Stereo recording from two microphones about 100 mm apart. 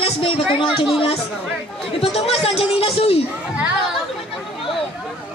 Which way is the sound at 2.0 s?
80° left.